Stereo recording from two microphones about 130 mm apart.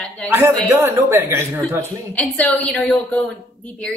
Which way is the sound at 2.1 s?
10° left (ahead or behind).